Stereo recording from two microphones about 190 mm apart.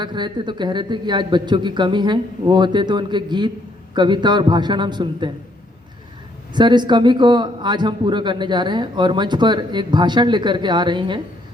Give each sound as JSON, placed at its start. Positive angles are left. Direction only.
{"t": 0.0, "sound": "a man's voice", "side_deg": -25}
{"t": 6.5, "sound": "a man's voice", "side_deg": -25}